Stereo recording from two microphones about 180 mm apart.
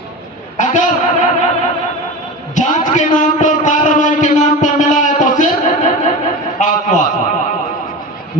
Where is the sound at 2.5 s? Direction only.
45° left (ahead or behind).